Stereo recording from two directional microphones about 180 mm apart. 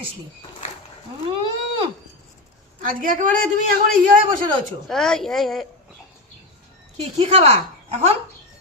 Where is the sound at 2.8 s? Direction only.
45° right (ahead or behind).